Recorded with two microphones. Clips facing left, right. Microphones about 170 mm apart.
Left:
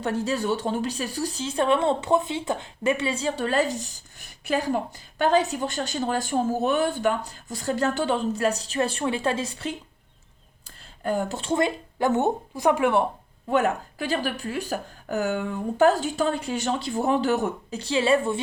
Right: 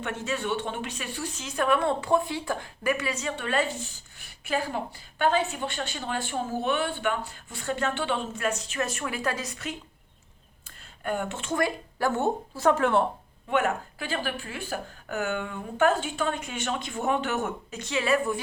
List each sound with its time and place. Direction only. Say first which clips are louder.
0.0 s speech: left 5 dB; 35° left (ahead or behind)
11.0 s speech: left 4 dB; 35° left (ahead or behind); by 13.1 s 15° left (ahead or behind)
13.5 s speech: left 3 dB; 40° left (ahead or behind)